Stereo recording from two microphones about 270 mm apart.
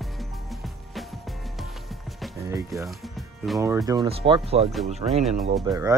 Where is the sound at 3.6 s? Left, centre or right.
Centre.